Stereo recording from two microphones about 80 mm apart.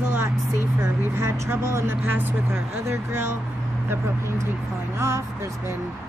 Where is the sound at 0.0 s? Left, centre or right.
Right.